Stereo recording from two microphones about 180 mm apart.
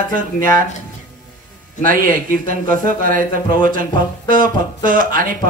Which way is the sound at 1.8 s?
50° right (ahead or behind).